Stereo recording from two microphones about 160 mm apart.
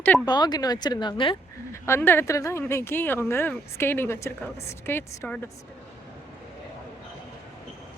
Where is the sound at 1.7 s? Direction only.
15° left (ahead or behind).